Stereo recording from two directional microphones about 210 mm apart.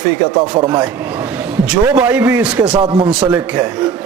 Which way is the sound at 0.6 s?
15° right (ahead or behind).